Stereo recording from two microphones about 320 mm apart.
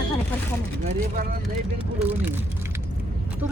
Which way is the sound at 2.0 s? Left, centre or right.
Centre.